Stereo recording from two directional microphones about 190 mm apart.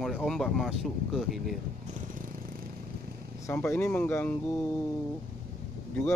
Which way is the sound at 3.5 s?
10° left (ahead or behind).